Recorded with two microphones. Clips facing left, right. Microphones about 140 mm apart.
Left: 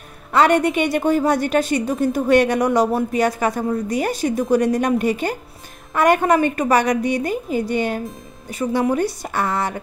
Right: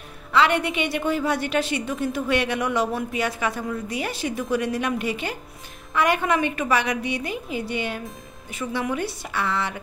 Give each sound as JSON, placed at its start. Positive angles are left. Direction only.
{"t": 0.3, "sound": "a woman's voice", "side_deg": 45}